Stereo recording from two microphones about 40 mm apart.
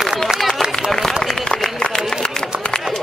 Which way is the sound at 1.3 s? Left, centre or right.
Centre.